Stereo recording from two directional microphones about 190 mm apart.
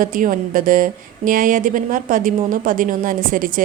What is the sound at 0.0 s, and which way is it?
A woman's voice, 45° right (ahead or behind).